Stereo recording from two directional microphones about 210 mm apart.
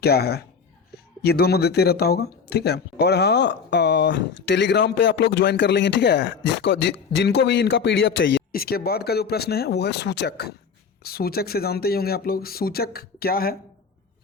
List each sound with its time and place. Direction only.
0.0 s speech: 50° left (ahead or behind)